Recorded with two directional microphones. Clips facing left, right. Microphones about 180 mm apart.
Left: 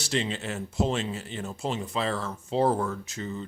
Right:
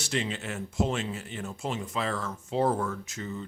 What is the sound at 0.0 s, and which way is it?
Speech, 30° left (ahead or behind).